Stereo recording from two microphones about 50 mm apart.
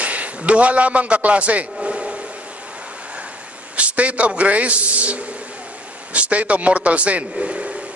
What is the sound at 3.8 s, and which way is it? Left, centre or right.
A man's voice, right.